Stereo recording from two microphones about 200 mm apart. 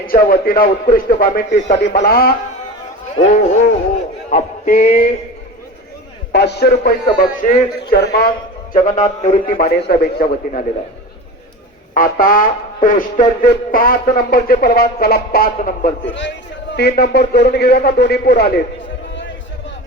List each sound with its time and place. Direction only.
0.1 s speech: 45° left (ahead or behind)
3.2 s a man's voice: 30° left (ahead or behind)
4.3 s male singing: 40° left (ahead or behind)
6.3 s a man's voice: 55° left (ahead or behind)
8.7 s a man's voice: 40° left (ahead or behind)
11.9 s speech: 45° left (ahead or behind)
16.0 s a man's voice: 65° left (ahead or behind)
16.9 s speech: 50° left (ahead or behind)